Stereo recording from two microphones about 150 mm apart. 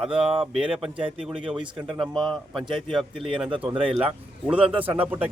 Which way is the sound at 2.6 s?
35° right (ahead or behind).